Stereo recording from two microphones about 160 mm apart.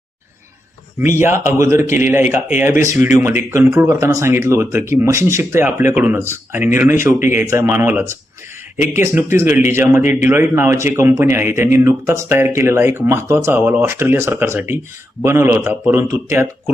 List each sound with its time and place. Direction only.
0.9 s speech: 15° right (ahead or behind)